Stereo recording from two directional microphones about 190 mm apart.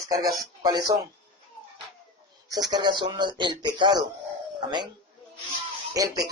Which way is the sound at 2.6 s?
25° right (ahead or behind).